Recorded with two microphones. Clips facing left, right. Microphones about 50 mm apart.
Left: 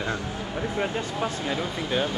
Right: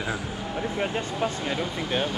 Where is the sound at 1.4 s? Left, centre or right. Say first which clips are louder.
Even; centre.